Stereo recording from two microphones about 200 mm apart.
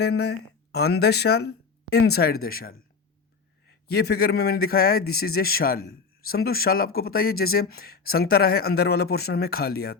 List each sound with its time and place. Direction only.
0.0 s a man's voice: 55° left (ahead or behind)